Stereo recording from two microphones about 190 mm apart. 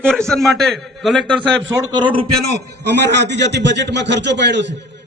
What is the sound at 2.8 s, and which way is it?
A man's voice, 65° right (ahead or behind).